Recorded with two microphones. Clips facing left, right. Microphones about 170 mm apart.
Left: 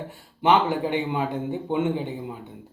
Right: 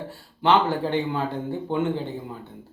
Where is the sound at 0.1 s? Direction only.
15° left (ahead or behind).